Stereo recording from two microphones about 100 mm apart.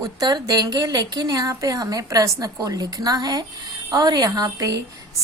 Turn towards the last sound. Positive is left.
turn(degrees=-35)  # may be behind; listen again after turning